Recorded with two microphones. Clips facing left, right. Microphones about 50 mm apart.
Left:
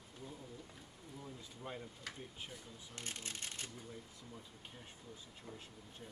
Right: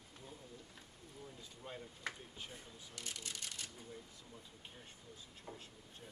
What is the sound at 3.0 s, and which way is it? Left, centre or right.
Speech, left.